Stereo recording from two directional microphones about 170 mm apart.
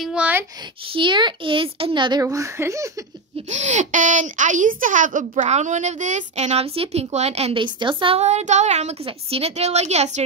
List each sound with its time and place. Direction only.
0.0 s speech: 5° right (ahead or behind)
0.6 s a woman's voice: 30° right (ahead or behind)
3.3 s speech: 45° right (ahead or behind)